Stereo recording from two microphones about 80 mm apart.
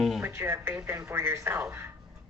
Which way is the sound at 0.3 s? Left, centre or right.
Right.